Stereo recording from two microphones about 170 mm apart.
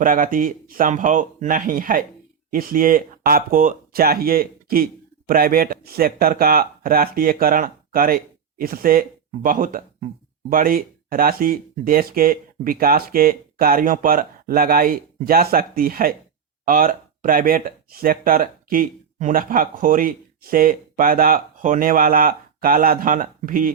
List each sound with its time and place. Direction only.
0.0 s speech: 55° right (ahead or behind)